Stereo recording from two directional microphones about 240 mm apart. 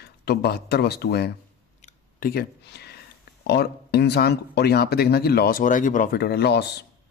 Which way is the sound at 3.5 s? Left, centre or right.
Left.